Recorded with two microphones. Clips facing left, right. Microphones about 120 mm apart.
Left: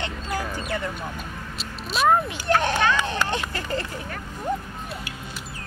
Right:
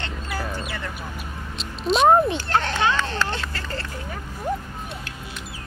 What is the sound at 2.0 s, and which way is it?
Children playing, 30° right (ahead or behind).